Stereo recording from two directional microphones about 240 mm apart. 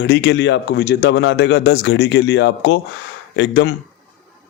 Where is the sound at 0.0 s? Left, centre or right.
Left.